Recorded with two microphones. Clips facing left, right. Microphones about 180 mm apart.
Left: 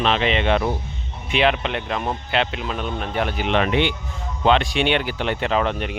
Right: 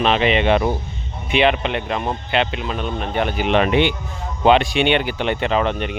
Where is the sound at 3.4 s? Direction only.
15° right (ahead or behind).